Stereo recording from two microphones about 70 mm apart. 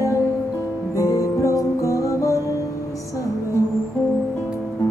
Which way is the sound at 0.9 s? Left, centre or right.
Left.